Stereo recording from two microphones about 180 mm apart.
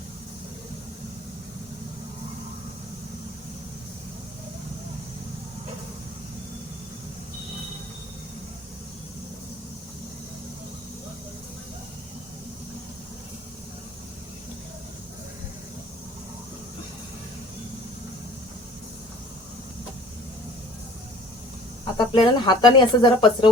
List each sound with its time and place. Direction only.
21.9 s speech: 25° left (ahead or behind)